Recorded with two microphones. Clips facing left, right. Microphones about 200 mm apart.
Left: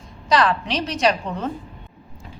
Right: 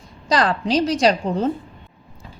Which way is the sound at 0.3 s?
35° right (ahead or behind).